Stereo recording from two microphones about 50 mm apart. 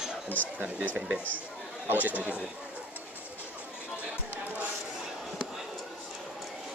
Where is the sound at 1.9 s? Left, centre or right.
Right.